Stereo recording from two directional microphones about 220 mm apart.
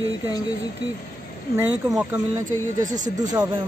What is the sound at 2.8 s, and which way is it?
Speech, 35° right (ahead or behind).